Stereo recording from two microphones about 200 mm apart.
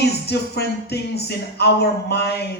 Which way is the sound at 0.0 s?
55° left (ahead or behind).